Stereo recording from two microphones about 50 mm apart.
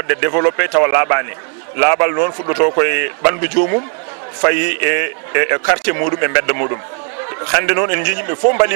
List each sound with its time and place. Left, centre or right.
0.0 s a man's voice: right